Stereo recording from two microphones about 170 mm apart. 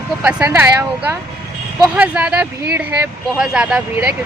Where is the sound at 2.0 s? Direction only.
10° right (ahead or behind).